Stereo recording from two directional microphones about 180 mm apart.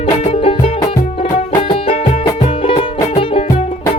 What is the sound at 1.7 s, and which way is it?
Music, 30° left (ahead or behind).